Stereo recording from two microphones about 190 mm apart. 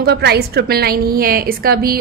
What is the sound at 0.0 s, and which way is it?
A woman's voice, 60° right (ahead or behind).